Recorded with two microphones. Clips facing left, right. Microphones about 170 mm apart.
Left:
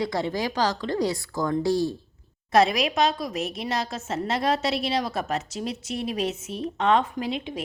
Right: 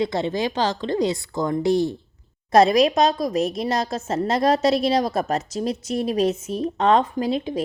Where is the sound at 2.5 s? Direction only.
40° right (ahead or behind).